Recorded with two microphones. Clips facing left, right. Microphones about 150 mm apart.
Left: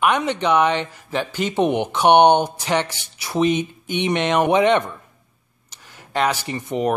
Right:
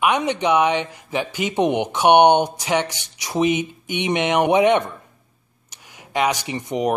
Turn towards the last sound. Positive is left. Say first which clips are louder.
# even
turn(degrees=-15)  # may be behind; listen again after turning